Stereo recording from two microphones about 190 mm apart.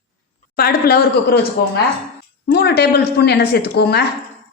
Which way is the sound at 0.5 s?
55° left (ahead or behind).